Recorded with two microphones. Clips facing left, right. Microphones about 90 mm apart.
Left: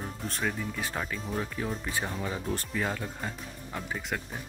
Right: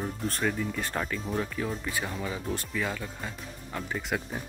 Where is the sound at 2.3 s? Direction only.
35° left (ahead or behind).